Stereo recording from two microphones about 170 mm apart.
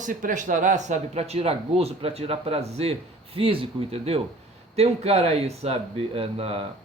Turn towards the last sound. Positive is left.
turn(degrees=-35)  # may be behind; listen again after turning